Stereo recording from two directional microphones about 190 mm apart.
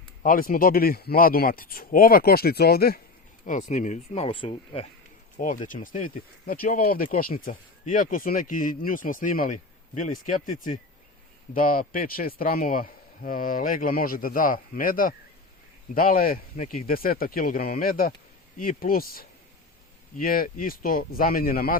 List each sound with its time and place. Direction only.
0.2 s speech: 45° left (ahead or behind)
3.4 s speech: 40° left (ahead or behind)
5.4 s speech: 45° left (ahead or behind)